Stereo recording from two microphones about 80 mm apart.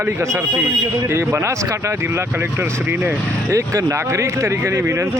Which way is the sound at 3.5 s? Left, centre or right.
Right.